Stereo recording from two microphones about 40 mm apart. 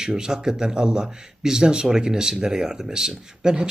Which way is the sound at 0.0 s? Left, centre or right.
Centre.